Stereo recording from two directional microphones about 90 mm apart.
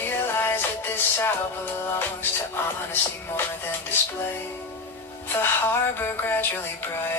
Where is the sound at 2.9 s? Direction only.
25° left (ahead or behind).